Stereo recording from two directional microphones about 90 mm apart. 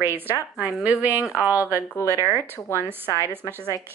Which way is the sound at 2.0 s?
30° left (ahead or behind).